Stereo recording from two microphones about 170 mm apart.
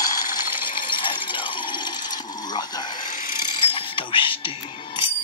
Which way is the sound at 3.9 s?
30° left (ahead or behind).